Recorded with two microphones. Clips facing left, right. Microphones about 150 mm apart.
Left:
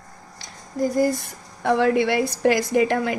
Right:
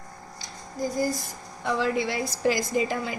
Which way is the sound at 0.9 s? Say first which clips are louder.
Left 6 dB; 60° left (ahead or behind).